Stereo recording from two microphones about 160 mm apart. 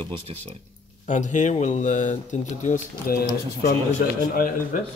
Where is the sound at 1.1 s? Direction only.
50° left (ahead or behind).